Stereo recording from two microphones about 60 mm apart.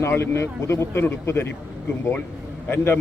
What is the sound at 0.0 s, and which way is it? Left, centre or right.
Speech, left.